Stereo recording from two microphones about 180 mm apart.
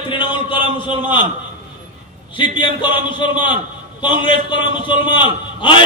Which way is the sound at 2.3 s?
25° left (ahead or behind).